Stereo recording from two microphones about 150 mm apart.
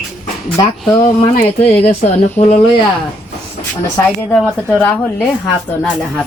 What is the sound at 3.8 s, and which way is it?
Speech, 15° left (ahead or behind).